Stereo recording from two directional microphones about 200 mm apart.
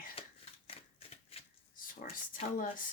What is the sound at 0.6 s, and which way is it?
Shuffling cards, 30° left (ahead or behind).